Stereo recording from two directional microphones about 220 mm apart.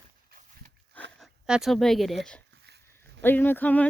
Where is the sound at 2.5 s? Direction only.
50° right (ahead or behind).